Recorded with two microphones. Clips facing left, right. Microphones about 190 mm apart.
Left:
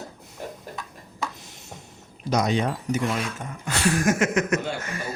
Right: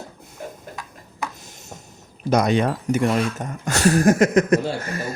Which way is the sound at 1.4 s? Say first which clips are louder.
Right 2 dB; 45° right (ahead or behind).